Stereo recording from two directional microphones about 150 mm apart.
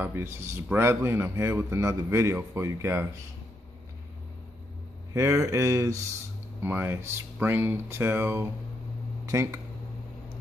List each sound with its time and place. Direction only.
0.0 s a man's voice: 15° right (ahead or behind)
5.1 s a man's voice: 20° right (ahead or behind)